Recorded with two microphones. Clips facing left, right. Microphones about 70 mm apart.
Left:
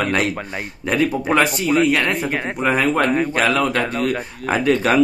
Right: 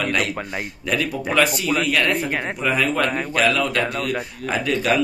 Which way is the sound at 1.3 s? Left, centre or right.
Left.